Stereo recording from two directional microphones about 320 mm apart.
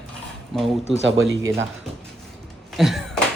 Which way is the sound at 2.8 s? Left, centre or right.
Centre.